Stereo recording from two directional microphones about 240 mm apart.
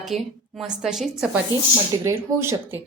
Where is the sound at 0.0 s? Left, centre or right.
Centre.